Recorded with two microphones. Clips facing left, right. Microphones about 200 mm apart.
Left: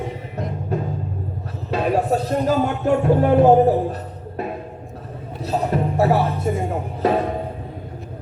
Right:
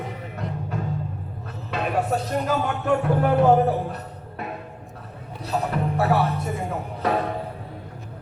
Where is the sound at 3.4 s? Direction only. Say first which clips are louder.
Left 4 dB; 35° left (ahead or behind).